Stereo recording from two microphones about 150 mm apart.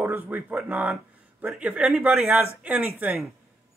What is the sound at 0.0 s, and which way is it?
A man's voice, 10° right (ahead or behind).